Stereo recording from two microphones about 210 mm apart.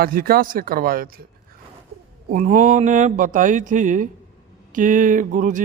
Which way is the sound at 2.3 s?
40° right (ahead or behind).